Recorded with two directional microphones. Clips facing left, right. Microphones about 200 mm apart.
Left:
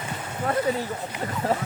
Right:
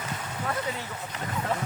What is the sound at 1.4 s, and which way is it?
Speech, 35° left (ahead or behind).